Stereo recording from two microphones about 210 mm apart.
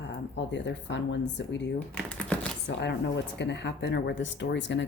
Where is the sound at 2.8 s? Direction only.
55° left (ahead or behind).